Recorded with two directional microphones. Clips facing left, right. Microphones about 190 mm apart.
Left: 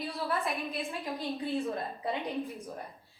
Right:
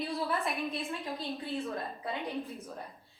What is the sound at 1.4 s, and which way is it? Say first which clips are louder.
Speech: left 5 dB; 15° left (ahead or behind).